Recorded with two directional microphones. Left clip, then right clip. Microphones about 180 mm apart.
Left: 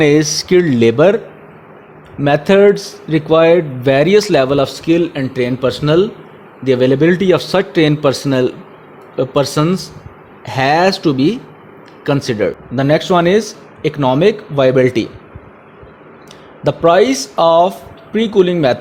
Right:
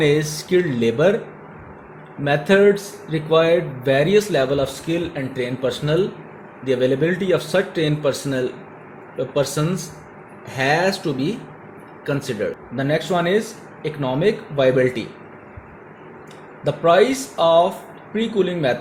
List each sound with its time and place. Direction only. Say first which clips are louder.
0.0 s speech: left 7 dB; 45° left (ahead or behind)
2.2 s speech: left 6 dB; 45° left (ahead or behind)
16.6 s speech: left 5 dB; 50° left (ahead or behind)